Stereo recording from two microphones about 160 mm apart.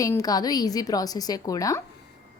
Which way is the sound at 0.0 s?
20° left (ahead or behind).